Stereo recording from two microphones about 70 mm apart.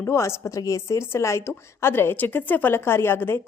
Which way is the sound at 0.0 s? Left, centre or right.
Left.